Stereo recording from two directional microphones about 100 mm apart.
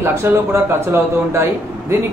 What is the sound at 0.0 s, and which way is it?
Speech, 25° right (ahead or behind).